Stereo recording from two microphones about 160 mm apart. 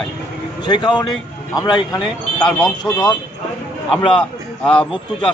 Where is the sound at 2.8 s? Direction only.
25° left (ahead or behind).